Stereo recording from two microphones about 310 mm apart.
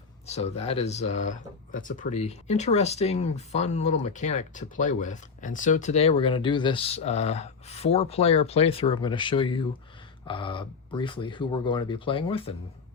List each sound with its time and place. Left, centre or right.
0.3 s speech: centre